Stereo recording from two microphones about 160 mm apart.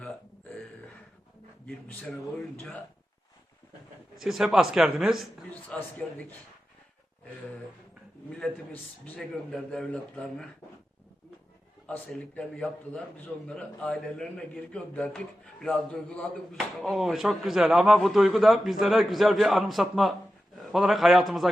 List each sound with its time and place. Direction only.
1.6 s a man's voice: 5° left (ahead or behind)
4.2 s a man's voice: centre (ahead or behind)
8.4 s speech: 10° left (ahead or behind)
11.9 s a man's voice: 5° left (ahead or behind)